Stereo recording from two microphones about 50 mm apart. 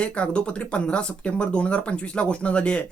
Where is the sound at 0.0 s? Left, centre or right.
Left.